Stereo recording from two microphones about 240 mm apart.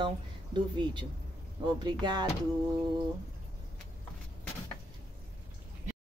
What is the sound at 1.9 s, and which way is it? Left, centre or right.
Speech, centre.